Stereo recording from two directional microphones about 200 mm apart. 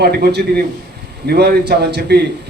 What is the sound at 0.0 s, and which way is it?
A man's voice, 50° right (ahead or behind).